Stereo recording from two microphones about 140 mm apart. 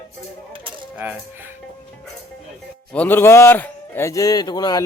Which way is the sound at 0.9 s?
10° right (ahead or behind).